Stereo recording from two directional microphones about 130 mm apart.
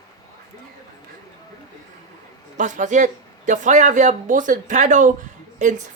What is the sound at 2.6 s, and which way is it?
Speech, 70° right (ahead or behind).